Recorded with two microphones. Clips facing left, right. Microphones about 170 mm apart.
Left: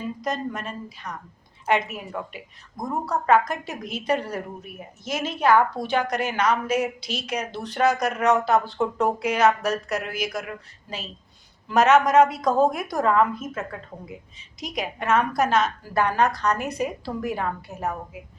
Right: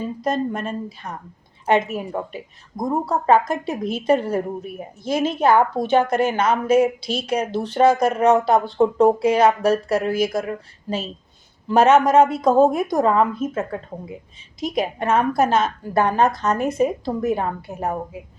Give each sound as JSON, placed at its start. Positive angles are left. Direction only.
{"t": 0.3, "sound": "a woman's voice", "side_deg": -30}